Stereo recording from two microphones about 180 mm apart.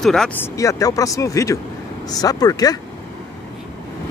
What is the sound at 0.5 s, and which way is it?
Speech, 20° left (ahead or behind).